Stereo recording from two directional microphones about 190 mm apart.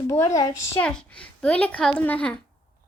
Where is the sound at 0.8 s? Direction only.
5° left (ahead or behind).